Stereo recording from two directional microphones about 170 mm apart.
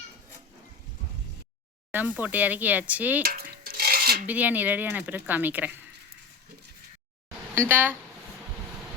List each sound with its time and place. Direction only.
1.9 s speech: 10° right (ahead or behind)
3.2 s dishes: 60° right (ahead or behind)
4.3 s speech: 10° right (ahead or behind)
7.5 s speech: 15° right (ahead or behind)